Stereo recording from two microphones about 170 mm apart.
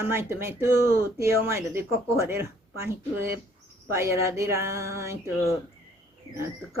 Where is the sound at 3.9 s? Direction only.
15° right (ahead or behind).